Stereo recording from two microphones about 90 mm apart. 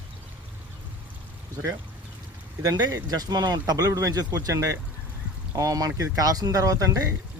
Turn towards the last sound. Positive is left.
turn(degrees=-40)  # may be behind; listen again after turning